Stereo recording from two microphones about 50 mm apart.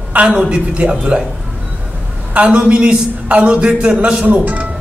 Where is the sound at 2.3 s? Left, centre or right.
Right.